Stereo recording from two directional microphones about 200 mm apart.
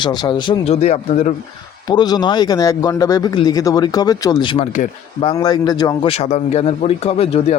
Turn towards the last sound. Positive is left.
turn(degrees=30)  # may be behind; listen again after turning